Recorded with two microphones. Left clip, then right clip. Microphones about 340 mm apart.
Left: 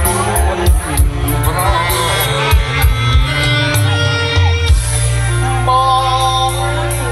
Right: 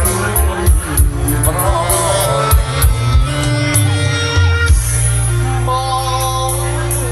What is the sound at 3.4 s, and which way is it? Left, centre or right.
Music, centre.